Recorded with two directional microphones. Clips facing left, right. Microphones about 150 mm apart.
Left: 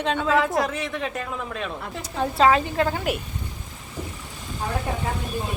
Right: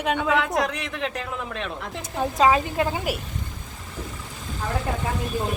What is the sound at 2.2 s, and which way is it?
Speech, 15° right (ahead or behind).